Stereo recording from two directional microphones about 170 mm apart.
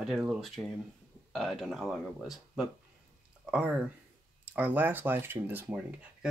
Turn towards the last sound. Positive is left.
turn(degrees=-10)  # may be behind; listen again after turning